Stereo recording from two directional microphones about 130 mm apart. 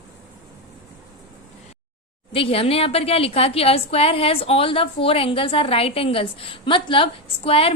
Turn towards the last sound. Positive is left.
turn(degrees=45)  # may be behind; listen again after turning